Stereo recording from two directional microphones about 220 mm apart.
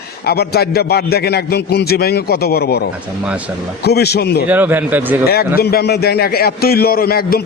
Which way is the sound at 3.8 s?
45° left (ahead or behind).